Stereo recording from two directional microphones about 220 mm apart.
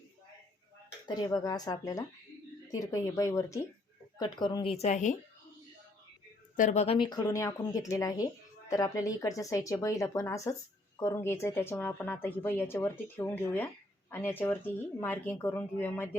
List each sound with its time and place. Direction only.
1.0 s speech: 15° left (ahead or behind); by 5.1 s 35° left (ahead or behind)
6.6 s speech: 30° left (ahead or behind); by 16.0 s 10° left (ahead or behind)